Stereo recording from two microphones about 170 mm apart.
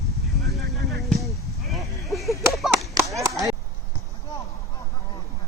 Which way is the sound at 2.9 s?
20° right (ahead or behind).